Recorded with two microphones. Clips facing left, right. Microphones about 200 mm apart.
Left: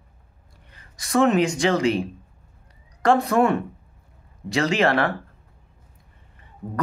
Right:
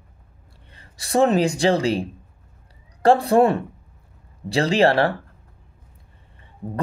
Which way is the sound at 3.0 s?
35° right (ahead or behind).